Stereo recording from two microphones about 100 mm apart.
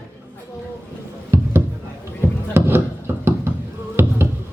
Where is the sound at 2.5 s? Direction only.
25° right (ahead or behind).